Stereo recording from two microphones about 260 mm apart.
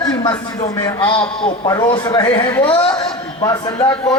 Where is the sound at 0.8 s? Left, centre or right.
Centre.